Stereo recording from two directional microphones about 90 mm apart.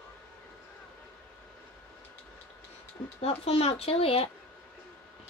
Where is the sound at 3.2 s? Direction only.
90° left.